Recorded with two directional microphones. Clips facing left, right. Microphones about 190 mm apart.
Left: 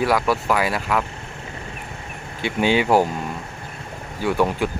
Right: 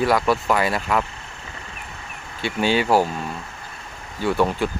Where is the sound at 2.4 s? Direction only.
15° left (ahead or behind).